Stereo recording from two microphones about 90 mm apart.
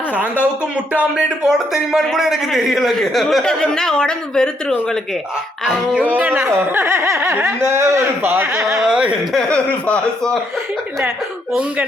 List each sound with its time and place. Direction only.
0.9 s a man's voice: 5° right (ahead or behind)
5.6 s music: 10° right (ahead or behind)
6.1 s speech: 20° right (ahead or behind)
8.8 s music: 10° right (ahead or behind)
9.3 s speech: 10° left (ahead or behind)